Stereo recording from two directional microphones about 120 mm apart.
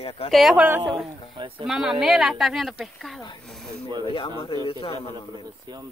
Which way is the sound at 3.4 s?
5° left (ahead or behind).